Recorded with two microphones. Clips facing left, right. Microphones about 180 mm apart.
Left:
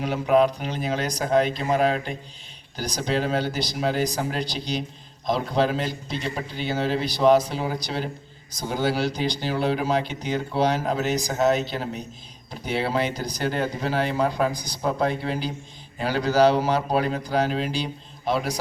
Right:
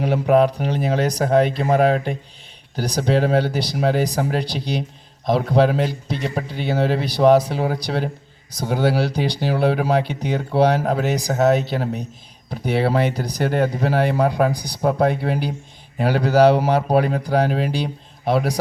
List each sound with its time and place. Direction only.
0.0 s speech: 60° right (ahead or behind)